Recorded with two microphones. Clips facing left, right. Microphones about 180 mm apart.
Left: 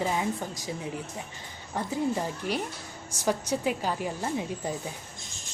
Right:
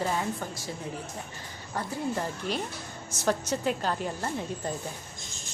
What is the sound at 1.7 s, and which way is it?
A woman's voice, 15° left (ahead or behind).